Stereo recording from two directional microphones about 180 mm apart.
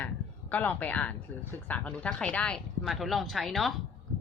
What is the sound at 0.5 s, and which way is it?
Speech, 10° left (ahead or behind).